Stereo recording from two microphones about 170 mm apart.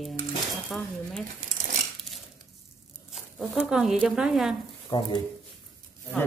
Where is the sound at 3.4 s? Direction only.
Centre (ahead or behind).